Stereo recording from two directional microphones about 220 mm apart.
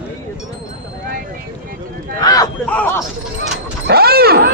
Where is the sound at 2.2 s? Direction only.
15° left (ahead or behind).